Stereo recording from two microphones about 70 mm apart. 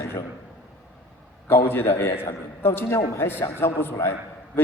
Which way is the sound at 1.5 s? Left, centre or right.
Left.